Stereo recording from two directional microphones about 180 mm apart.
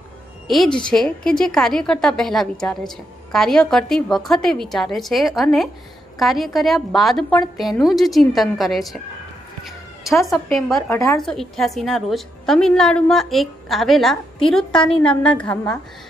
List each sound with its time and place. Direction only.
0.5 s a woman's voice: centre (ahead or behind)
10.9 s a woman's voice: 15° left (ahead or behind)
11.1 s a woman's voice: centre (ahead or behind)